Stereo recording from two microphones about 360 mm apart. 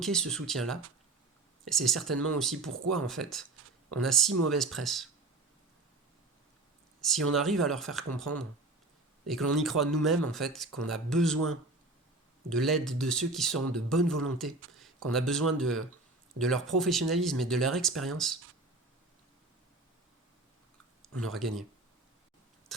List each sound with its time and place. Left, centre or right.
0.0 s speech: centre
2.1 s speech: right
2.4 s speech: centre
7.0 s speech: centre
12.5 s speech: centre
21.3 s speech: centre